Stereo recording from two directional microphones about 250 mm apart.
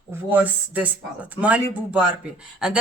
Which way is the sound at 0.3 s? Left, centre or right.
Centre.